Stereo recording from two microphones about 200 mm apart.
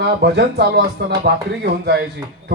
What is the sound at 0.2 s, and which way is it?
A man's voice, 55° right (ahead or behind).